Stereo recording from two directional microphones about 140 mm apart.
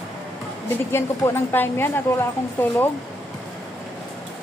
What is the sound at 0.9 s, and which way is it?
Speech, 15° left (ahead or behind).